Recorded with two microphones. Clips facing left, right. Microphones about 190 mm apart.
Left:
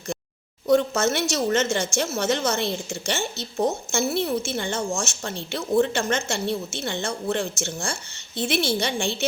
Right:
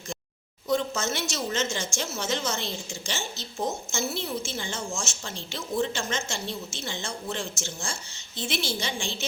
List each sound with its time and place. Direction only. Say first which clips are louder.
0.7 s a woman's voice: left 7 dB; 65° left (ahead or behind)